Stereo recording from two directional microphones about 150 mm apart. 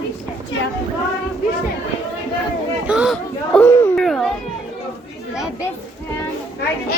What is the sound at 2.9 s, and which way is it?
Speech, 5° right (ahead or behind).